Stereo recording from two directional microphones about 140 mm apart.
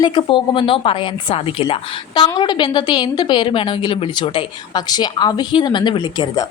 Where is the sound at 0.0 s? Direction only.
35° left (ahead or behind).